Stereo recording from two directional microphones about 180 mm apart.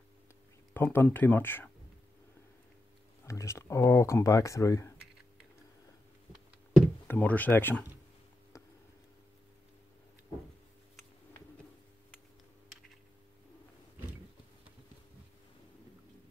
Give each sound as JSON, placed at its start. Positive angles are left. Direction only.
{"t": 0.7, "sound": "speech", "side_deg": 10}
{"t": 3.3, "sound": "speech", "side_deg": 15}
{"t": 7.1, "sound": "speech", "side_deg": 10}
{"t": 8.5, "sound": "a sound", "side_deg": 15}